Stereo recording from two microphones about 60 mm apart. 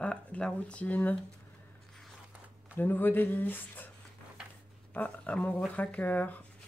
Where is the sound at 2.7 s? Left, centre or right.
Left.